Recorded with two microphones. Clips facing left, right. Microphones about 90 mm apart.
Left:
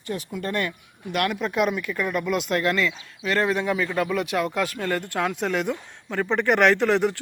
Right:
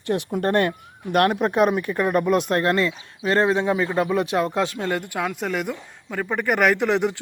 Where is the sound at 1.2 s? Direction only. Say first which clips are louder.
Right 5 dB; 45° right (ahead or behind); by 6.8 s 5° right (ahead or behind).